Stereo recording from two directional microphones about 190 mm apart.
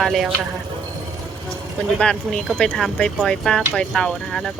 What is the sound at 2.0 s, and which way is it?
Speech, 5° left (ahead or behind).